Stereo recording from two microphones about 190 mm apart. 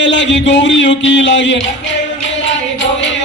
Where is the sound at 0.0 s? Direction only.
70° left (ahead or behind).